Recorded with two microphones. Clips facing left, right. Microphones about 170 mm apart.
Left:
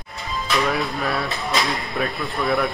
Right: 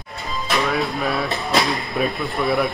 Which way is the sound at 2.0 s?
15° right (ahead or behind).